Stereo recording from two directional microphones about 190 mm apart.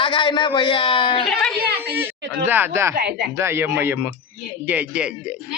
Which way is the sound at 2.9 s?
55° right (ahead or behind).